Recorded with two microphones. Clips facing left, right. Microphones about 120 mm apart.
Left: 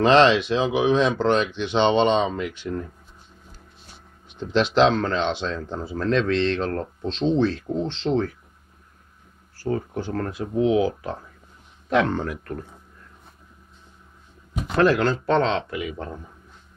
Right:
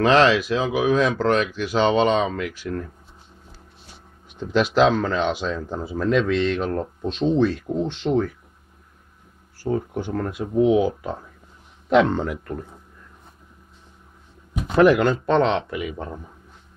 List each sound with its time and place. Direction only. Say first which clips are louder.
0.0 s speech: left 1 dB; 30° left (ahead or behind)
4.4 s speech: even; 5° right (ahead or behind)
9.6 s speech: right 2 dB; 15° right (ahead or behind)
14.7 s speech: right 3 dB; 15° right (ahead or behind)